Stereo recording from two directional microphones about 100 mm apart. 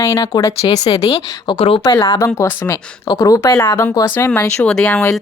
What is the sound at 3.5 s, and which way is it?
Speech, 25° left (ahead or behind).